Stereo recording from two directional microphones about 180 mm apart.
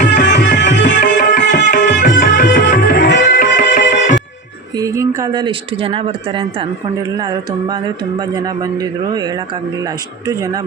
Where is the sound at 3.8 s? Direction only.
80° left.